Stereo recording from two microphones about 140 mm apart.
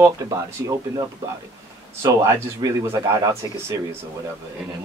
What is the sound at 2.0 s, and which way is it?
Speech, 25° right (ahead or behind).